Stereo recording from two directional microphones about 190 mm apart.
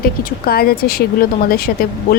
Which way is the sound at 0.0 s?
50° left (ahead or behind).